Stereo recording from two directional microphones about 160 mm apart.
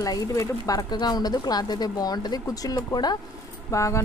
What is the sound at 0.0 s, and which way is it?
Speech, 20° left (ahead or behind).